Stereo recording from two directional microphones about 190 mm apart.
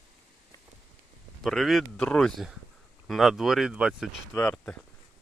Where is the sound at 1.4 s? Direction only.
Centre (ahead or behind).